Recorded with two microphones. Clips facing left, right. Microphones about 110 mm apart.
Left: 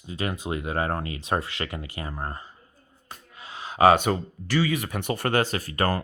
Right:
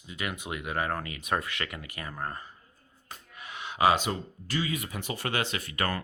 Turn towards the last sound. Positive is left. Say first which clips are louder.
# left 6 dB
turn(degrees=35)  # may be behind; listen again after turning